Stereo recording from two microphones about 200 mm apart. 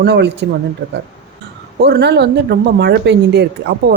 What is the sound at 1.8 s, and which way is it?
Speech, 55° right (ahead or behind).